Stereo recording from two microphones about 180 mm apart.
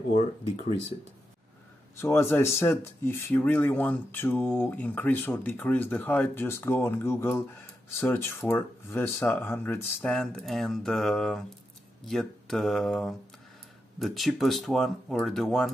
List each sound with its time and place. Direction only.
2.0 s speech: 15° left (ahead or behind)